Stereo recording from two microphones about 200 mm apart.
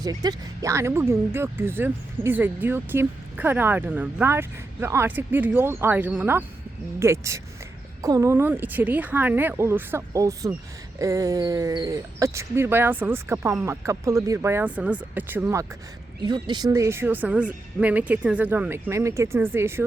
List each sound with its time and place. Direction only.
0.0 s speech: 20° right (ahead or behind)
16.2 s speech: 20° right (ahead or behind)